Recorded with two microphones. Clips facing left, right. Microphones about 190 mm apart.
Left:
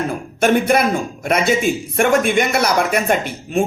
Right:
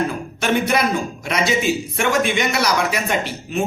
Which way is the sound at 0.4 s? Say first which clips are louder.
Left 4 dB; 50° left (ahead or behind).